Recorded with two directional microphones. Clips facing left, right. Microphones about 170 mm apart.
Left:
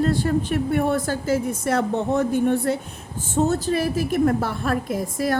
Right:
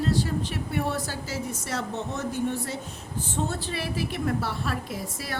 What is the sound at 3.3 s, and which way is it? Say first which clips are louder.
A woman's voice: left 11 dB; 45° left (ahead or behind).